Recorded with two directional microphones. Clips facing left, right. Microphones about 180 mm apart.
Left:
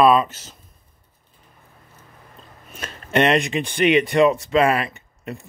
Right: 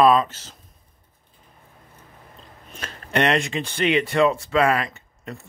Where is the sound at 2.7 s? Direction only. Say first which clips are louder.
Left 3 dB; 20° left (ahead or behind).